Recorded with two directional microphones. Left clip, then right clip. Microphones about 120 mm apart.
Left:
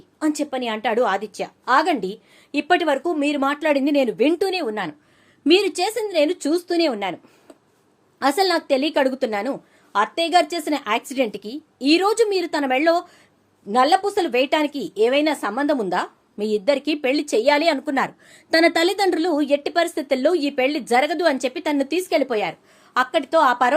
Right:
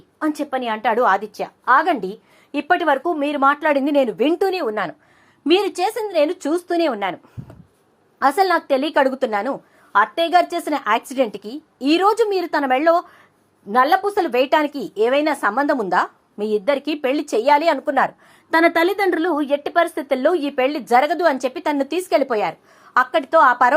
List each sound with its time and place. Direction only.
0.2 s a woman's voice: 15° left (ahead or behind)
4.6 s a woman's voice: 5° left (ahead or behind)
8.2 s a woman's voice: 5° left (ahead or behind)
16.4 s a woman's voice: 15° left (ahead or behind); by 23.7 s centre (ahead or behind)